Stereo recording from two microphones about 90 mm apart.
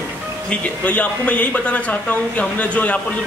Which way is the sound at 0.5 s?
15° left (ahead or behind).